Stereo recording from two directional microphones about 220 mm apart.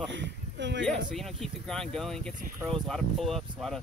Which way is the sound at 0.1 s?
55° right (ahead or behind).